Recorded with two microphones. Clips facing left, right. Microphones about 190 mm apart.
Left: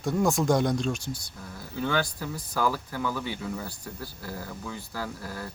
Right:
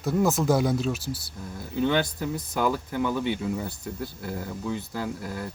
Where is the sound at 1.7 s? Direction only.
20° right (ahead or behind).